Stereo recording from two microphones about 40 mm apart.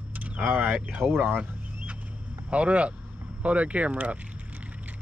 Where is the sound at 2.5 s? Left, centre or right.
Right.